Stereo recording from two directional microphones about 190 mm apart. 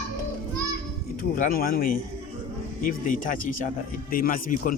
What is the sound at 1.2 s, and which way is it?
Speech, 45° left (ahead or behind).